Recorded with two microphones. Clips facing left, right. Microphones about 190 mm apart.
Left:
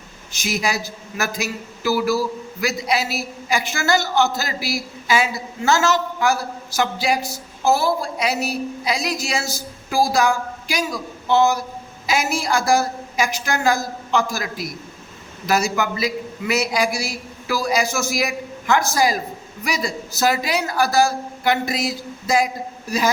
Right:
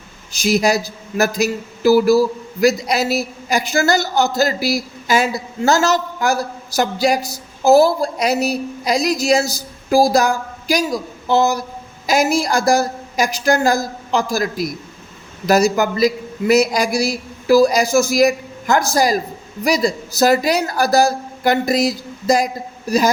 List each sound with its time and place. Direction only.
0.3 s a man's voice: 35° right (ahead or behind)